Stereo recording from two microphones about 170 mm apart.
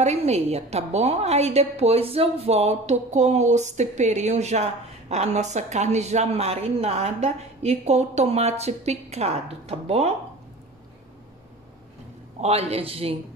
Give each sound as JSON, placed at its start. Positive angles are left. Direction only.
{"t": 0.0, "sound": "speech", "side_deg": -40}
{"t": 12.4, "sound": "speech", "side_deg": -40}